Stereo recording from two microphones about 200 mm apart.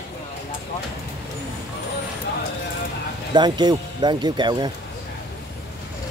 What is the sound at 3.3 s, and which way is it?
Speech, 20° right (ahead or behind).